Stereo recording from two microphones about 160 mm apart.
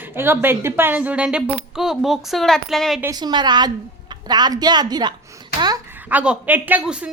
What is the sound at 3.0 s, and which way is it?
Speech, 25° right (ahead or behind).